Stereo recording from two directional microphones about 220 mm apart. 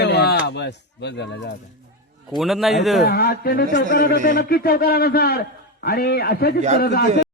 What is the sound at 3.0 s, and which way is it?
A man's voice, 45° left (ahead or behind).